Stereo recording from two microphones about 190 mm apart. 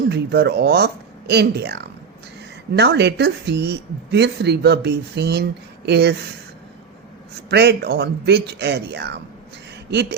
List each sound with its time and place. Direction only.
0.1 s speech: 60° right (ahead or behind)
7.5 s speech: 60° right (ahead or behind)